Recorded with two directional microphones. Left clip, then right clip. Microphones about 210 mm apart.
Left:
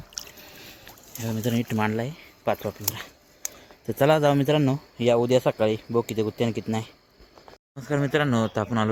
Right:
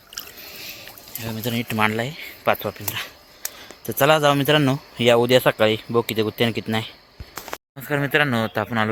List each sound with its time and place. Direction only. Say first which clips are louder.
0.6 s rowboat: right 9 dB; 35° left (ahead or behind)
1.3 s speech: right 1 dB; 30° left (ahead or behind)
4.4 s speech: right 5 dB; 5° left (ahead or behind)